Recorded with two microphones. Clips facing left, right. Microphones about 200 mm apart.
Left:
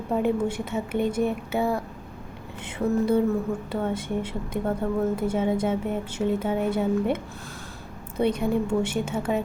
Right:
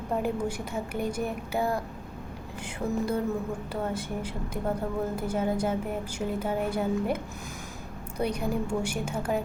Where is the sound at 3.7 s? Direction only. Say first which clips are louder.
Left 4 dB; 10° right (ahead or behind).